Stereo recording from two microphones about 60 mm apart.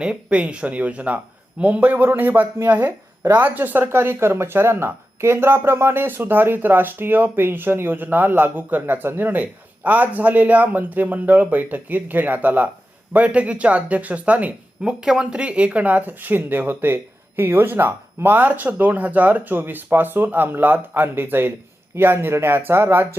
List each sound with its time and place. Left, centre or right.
0.0 s speech: centre
14.8 s speech: centre; by 23.0 s right